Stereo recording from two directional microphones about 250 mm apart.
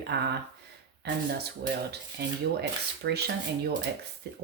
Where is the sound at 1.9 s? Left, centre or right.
Right.